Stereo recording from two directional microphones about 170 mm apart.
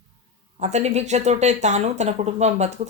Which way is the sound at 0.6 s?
40° right (ahead or behind).